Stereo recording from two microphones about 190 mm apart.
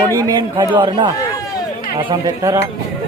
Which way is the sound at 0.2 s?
20° right (ahead or behind).